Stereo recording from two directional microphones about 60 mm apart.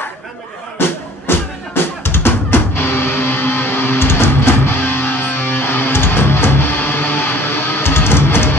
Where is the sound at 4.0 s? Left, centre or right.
Left.